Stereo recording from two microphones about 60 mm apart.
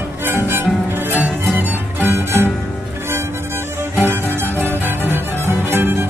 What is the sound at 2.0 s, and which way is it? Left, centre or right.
Music, right.